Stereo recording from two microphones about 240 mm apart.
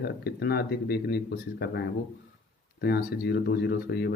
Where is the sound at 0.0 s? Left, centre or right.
Left.